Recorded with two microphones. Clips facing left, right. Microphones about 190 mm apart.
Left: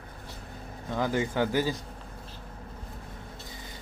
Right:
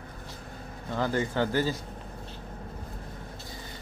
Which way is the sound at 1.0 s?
15° left (ahead or behind).